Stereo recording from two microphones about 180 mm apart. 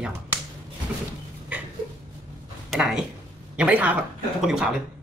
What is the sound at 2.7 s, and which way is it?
Speech, 5° right (ahead or behind).